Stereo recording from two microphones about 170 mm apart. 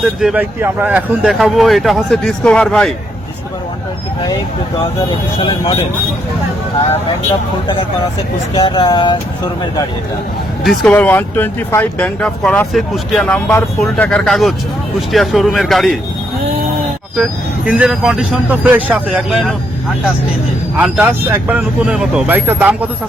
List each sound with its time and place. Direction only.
0.0 s speech: centre (ahead or behind)
5.4 s speech: 25° left (ahead or behind)
8.5 s speech: 30° left (ahead or behind)
10.6 s speech: 5° left (ahead or behind)
17.7 s speech: 5° right (ahead or behind)
20.7 s speech: 5° right (ahead or behind)